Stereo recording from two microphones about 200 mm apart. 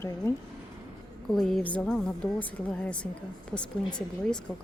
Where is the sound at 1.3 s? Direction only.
Centre (ahead or behind).